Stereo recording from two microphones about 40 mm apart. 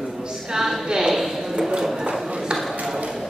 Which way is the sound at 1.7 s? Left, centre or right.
Centre.